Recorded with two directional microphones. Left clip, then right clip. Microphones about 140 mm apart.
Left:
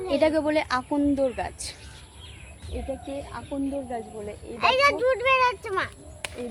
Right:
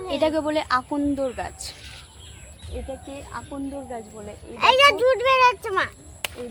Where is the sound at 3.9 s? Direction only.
25° left (ahead or behind).